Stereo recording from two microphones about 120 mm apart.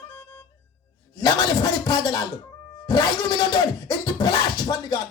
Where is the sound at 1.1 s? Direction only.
35° left (ahead or behind).